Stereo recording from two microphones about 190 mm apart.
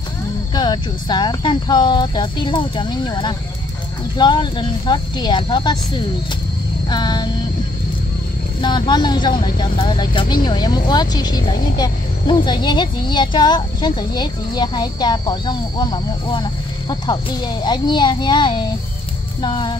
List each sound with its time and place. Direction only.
0.6 s speech: 20° left (ahead or behind)
8.5 s speech: 25° left (ahead or behind)
17.6 s speech: 25° left (ahead or behind)